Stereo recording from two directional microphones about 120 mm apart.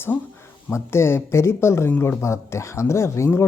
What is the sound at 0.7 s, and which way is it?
Speech, 20° left (ahead or behind).